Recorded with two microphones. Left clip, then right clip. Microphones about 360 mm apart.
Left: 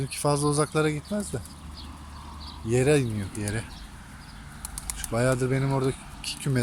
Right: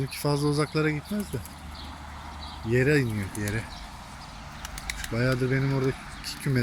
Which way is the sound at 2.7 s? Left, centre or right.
Centre.